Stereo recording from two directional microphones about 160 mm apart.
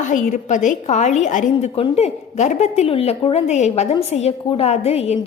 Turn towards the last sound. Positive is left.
turn(degrees=40)  # may be behind; listen again after turning